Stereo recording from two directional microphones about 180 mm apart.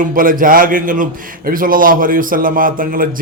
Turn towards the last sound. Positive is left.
turn(degrees=-50)  # may be behind; listen again after turning